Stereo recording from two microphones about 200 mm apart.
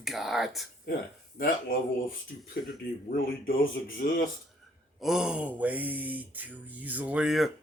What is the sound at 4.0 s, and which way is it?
Speech, 45° left (ahead or behind).